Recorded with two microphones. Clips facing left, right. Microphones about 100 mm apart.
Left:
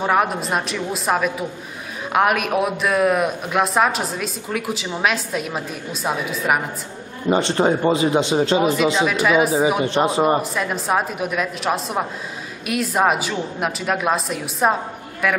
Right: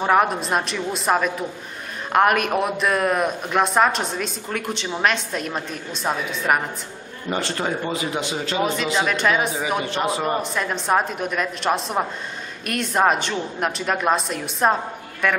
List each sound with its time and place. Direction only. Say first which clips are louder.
0.0 s a man's voice: right 1 dB; centre (ahead or behind)
7.2 s speech: left 7 dB; 25° left (ahead or behind)
8.9 s a man's voice: left 3 dB; 5° left (ahead or behind)
9.8 s speech: left 5 dB; 30° left (ahead or behind)
10.4 s a man's voice: left 1 dB; 5° left (ahead or behind)